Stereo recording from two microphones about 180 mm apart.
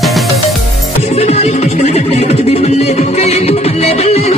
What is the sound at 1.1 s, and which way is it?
Music, 35° left (ahead or behind).